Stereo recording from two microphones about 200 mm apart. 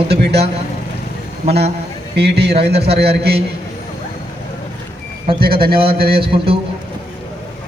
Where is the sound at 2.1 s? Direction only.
55° right (ahead or behind).